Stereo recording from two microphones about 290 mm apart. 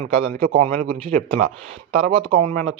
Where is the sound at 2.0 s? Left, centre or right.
Centre.